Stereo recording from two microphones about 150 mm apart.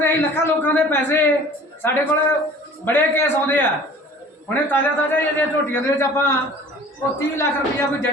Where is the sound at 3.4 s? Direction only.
15° left (ahead or behind).